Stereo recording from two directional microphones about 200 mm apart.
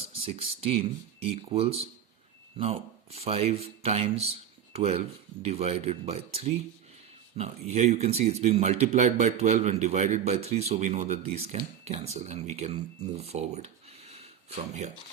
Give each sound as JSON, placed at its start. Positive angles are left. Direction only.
{"t": 0.0, "sound": "speech", "side_deg": -30}